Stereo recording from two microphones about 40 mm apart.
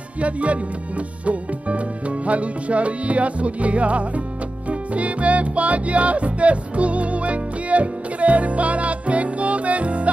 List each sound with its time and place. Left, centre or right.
0.2 s speech: right
4.6 s music: right